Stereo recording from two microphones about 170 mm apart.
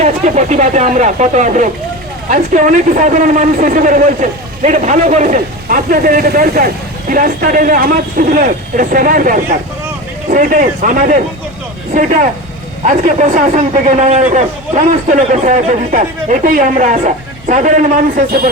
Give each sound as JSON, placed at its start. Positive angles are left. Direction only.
{"t": 0.0, "sound": "a woman's voice", "side_deg": -45}
{"t": 13.1, "sound": "a woman's voice", "side_deg": -45}